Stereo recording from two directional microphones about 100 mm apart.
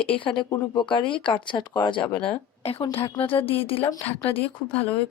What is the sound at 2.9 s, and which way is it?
Speech, 70° left (ahead or behind).